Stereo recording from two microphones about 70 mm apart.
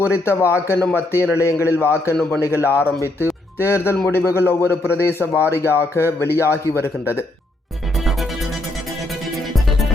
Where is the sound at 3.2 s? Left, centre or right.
Left.